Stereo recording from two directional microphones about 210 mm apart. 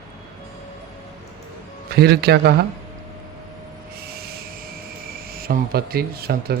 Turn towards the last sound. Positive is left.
turn(degrees=-45)  # may be behind; listen again after turning